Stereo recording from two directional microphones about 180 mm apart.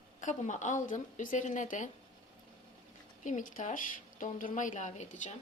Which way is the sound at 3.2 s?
45° left (ahead or behind).